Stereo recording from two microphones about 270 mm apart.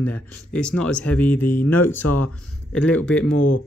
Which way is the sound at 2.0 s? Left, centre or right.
Left.